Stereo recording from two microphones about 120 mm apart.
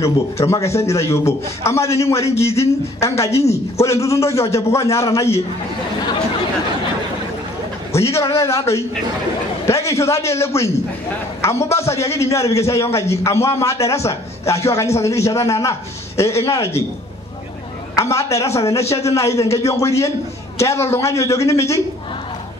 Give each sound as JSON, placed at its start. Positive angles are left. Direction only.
{"t": 0.0, "sound": "a man's voice", "side_deg": 25}
{"t": 7.9, "sound": "a man's voice", "side_deg": 25}
{"t": 17.9, "sound": "a man's voice", "side_deg": 25}